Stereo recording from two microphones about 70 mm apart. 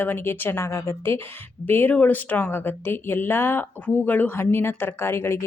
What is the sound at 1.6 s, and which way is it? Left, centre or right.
A woman's voice, left.